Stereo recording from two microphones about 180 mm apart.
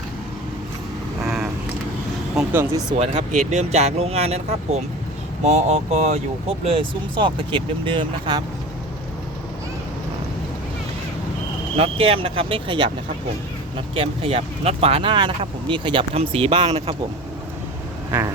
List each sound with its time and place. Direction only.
1.2 s vehicle: 5° right (ahead or behind)
2.3 s a sound: 10° right (ahead or behind)
3.0 s speech: 35° right (ahead or behind)
11.8 s speech: 30° right (ahead or behind)